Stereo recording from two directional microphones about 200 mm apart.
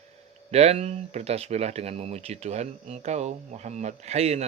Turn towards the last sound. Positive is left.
turn(degrees=-30)  # may be behind; listen again after turning